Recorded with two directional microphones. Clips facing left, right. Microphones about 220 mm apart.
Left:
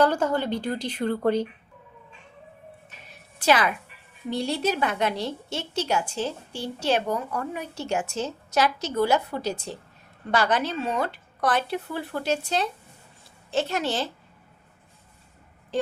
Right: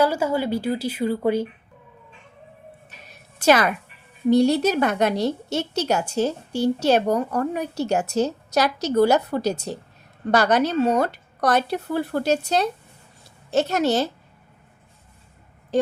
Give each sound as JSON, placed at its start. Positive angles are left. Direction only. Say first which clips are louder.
{"t": 0.0, "sound": "a woman's voice", "louder": "right 1 dB", "side_deg": -10}
{"t": 3.1, "sound": "music", "louder": "right 4 dB", "side_deg": -45}
{"t": 4.3, "sound": "a woman's voice", "louder": "right 9 dB", "side_deg": -45}
{"t": 15.7, "sound": "speech", "louder": "right 6 dB", "side_deg": -45}